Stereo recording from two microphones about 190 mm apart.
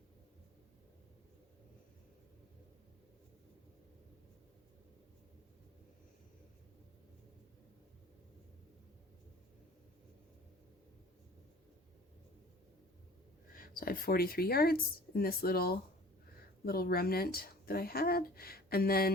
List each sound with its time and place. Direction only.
13.5 s speech: 50° left (ahead or behind)